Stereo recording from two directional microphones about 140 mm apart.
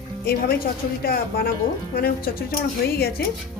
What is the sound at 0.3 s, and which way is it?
Speech, 90° left.